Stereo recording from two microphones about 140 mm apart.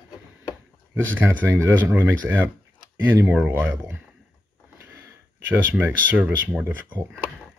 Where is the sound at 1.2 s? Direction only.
15° right (ahead or behind).